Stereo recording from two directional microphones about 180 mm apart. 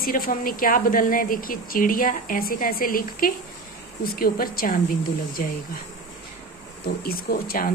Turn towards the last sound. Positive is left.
turn(degrees=55)  # may be behind; listen again after turning